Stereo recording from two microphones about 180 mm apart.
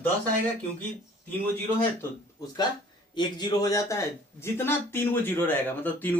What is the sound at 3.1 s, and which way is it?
A man's voice, 25° left (ahead or behind).